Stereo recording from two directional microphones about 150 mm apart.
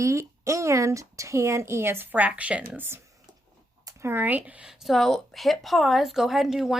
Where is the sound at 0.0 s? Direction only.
20° right (ahead or behind).